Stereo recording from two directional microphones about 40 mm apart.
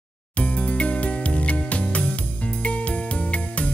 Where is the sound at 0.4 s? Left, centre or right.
Left.